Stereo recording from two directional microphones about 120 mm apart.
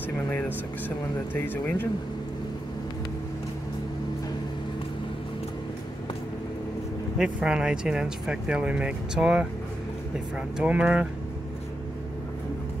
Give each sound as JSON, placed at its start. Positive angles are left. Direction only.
{"t": 0.8, "sound": "speech", "side_deg": 15}
{"t": 7.2, "sound": "speech", "side_deg": -5}